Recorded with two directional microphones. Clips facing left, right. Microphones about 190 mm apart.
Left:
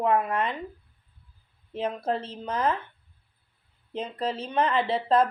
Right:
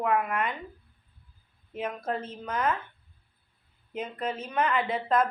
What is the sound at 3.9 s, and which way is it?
Speech, 30° left (ahead or behind).